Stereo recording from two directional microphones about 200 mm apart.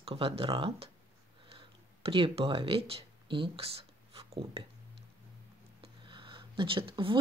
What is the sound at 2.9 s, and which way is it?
Speech, 25° right (ahead or behind).